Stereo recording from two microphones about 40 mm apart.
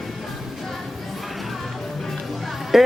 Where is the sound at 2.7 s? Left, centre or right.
Centre.